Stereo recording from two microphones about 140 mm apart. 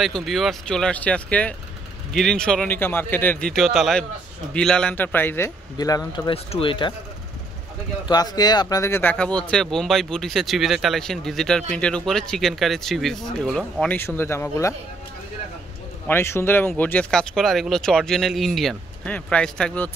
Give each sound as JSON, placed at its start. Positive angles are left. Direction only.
{"t": 0.0, "sound": "a man's voice", "side_deg": 0}
{"t": 5.8, "sound": "speech", "side_deg": 25}
{"t": 8.1, "sound": "speech", "side_deg": 30}
{"t": 9.1, "sound": "speech", "side_deg": 5}
{"t": 13.9, "sound": "a man's voice", "side_deg": 15}
{"t": 16.1, "sound": "speech", "side_deg": 15}